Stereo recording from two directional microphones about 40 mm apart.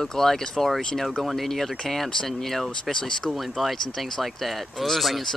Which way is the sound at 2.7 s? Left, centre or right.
Centre.